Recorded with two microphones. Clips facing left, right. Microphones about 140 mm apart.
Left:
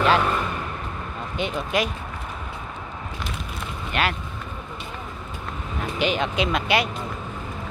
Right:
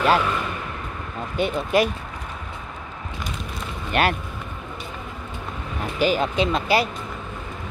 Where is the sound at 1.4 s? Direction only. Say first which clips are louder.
Right 4 dB; 40° right (ahead or behind).